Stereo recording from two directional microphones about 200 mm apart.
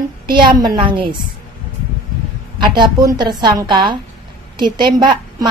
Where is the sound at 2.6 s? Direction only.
20° right (ahead or behind).